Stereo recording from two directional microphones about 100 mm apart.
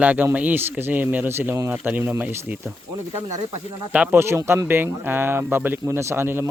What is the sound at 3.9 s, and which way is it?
Speech, 15° right (ahead or behind).